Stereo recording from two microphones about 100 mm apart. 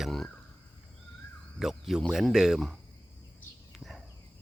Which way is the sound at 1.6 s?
5° right (ahead or behind).